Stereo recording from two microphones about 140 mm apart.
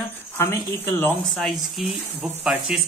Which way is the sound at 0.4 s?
15° left (ahead or behind).